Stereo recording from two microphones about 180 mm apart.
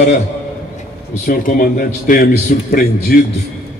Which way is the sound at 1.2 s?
50° left (ahead or behind).